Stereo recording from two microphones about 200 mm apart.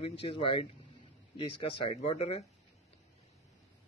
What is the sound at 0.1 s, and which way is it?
A man's voice, 30° left (ahead or behind).